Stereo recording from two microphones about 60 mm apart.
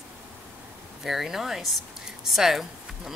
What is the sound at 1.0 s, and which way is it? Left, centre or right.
Speech, centre.